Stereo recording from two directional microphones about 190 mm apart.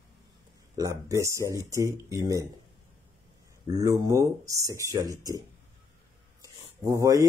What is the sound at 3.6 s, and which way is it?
Speech, 15° right (ahead or behind).